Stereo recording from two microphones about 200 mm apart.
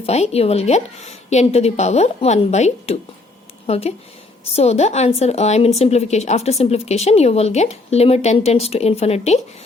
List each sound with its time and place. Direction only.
0.0 s a woman's voice: 30° left (ahead or behind)